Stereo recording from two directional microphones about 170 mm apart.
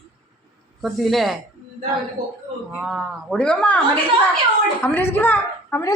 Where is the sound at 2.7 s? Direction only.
5° right (ahead or behind); by 5.9 s 15° left (ahead or behind).